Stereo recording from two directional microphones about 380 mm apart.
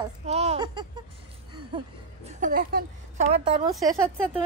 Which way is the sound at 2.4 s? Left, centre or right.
Right.